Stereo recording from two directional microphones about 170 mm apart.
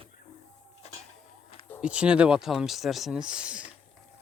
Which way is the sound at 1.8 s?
5° right (ahead or behind).